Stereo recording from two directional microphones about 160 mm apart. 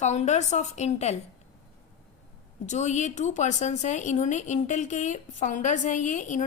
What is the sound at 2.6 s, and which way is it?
A woman's voice, 45° left (ahead or behind).